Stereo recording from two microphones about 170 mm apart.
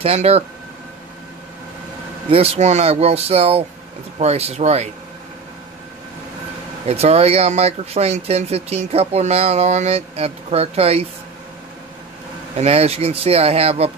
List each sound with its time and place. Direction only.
0.0 s speech: 35° right (ahead or behind)
2.3 s speech: 35° right (ahead or behind)
6.9 s speech: 40° right (ahead or behind)
12.5 s speech: 35° right (ahead or behind)